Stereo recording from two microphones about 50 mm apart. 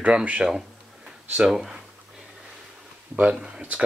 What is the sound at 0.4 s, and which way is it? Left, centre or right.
Speech, centre.